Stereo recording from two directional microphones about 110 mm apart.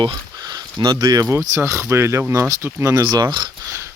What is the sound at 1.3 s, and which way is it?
Speech, 30° right (ahead or behind).